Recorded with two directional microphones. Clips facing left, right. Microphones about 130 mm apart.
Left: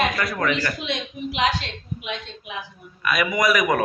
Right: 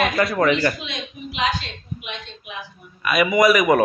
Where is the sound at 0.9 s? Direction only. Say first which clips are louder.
Left 4 dB; 70° left (ahead or behind).